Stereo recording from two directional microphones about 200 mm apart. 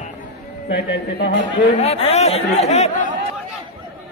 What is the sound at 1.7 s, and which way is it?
A man's voice, 30° left (ahead or behind).